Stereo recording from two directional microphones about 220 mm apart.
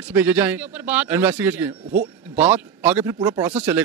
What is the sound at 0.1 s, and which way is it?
A man's voice, 10° right (ahead or behind).